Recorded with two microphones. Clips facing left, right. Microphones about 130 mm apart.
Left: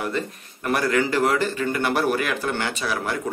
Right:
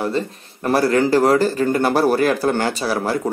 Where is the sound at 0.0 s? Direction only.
30° right (ahead or behind).